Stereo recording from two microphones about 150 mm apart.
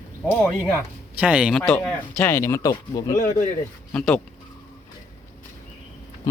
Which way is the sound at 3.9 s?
5° left (ahead or behind).